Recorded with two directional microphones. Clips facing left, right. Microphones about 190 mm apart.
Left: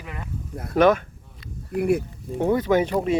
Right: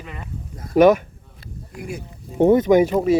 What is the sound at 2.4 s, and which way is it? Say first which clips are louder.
Speech: right 6 dB; 20° right (ahead or behind).